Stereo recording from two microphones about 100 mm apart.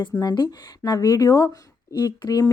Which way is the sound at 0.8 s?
35° left (ahead or behind).